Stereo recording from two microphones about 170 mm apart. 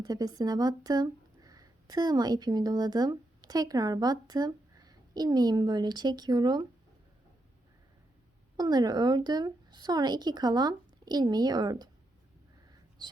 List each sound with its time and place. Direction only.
0.0 s speech: 25° right (ahead or behind)
8.5 s speech: 25° right (ahead or behind)